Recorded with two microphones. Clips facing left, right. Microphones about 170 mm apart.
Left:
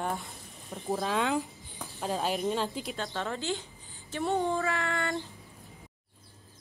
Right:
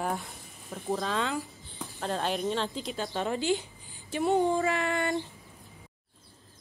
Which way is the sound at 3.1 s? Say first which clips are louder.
Right 6 dB; 15° right (ahead or behind).